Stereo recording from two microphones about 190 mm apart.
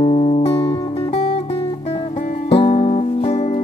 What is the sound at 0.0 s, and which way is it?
Music, 30° left (ahead or behind).